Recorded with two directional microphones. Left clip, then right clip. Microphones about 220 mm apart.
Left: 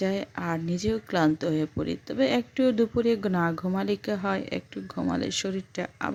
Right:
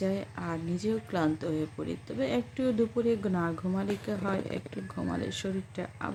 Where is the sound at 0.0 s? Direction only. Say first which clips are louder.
Left 4 dB; 35° left (ahead or behind).